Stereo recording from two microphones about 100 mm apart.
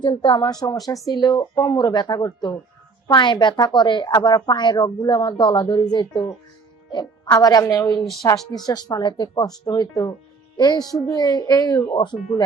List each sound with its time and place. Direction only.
0.0 s speech: 50° left (ahead or behind)
7.3 s a woman's voice: 40° left (ahead or behind)